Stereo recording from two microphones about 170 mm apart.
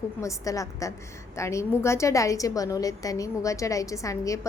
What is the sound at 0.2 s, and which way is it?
A woman's voice, 20° left (ahead or behind).